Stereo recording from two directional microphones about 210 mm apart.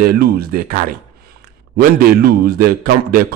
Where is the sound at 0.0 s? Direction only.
45° right (ahead or behind).